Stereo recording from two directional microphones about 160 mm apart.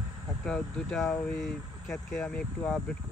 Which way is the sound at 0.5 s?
5° left (ahead or behind).